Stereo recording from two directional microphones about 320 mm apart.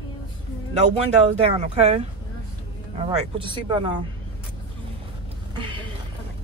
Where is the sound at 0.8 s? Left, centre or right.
Centre.